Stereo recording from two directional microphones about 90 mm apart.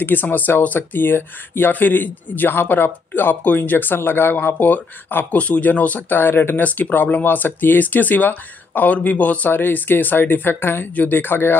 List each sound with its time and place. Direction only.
0.0 s speech: 20° left (ahead or behind)